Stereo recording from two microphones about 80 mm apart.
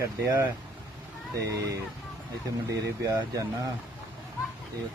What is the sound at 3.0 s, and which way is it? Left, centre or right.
Speech, right.